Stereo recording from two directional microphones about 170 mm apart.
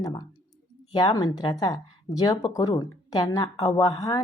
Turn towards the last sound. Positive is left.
turn(degrees=20)  # may be behind; listen again after turning